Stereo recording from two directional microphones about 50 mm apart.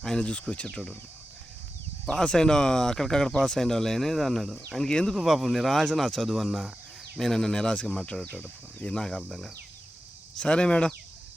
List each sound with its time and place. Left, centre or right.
0.0 s speech: centre
0.7 s speech: centre
2.0 s speech: centre
4.9 s speech: centre
5.1 s speech: centre
10.3 s speech: centre